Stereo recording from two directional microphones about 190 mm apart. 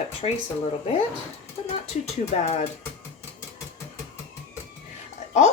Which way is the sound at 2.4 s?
35° left (ahead or behind).